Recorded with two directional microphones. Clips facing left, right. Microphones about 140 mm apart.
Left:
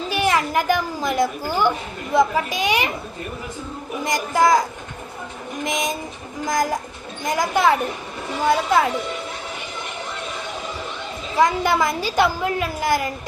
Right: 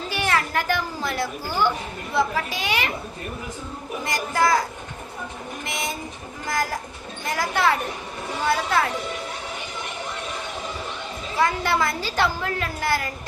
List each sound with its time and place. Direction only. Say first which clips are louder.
0.1 s a child's voice: left 4 dB; 15° left (ahead or behind)
4.0 s a woman's voice: left 4 dB; 15° left (ahead or behind)
5.6 s a woman's voice: left 6 dB; 15° left (ahead or behind)
11.3 s a woman's voice: left 4 dB; 15° left (ahead or behind)